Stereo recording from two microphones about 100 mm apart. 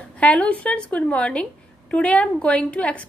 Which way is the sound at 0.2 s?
15° left (ahead or behind).